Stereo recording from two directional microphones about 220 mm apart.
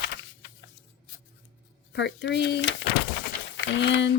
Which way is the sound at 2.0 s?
50° left (ahead or behind).